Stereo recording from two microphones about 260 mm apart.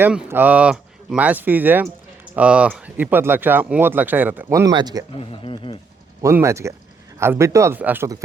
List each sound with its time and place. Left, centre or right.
0.0 s speech: centre
5.3 s speech: centre
6.2 s speech: centre